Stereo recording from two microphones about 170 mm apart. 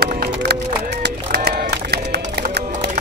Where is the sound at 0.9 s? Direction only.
80° right.